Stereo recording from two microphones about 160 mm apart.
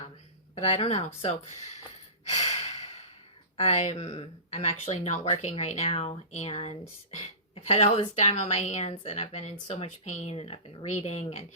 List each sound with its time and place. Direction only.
0.5 s speech: 45° left (ahead or behind)
2.2 s sigh: 45° left (ahead or behind)
3.6 s speech: 45° left (ahead or behind)